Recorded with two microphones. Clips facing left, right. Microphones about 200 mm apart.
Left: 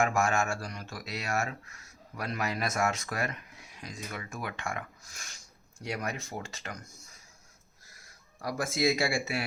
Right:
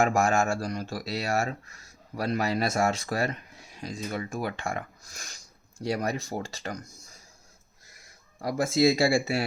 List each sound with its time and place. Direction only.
0.0 s speech: 35° right (ahead or behind)
8.4 s speech: 25° right (ahead or behind)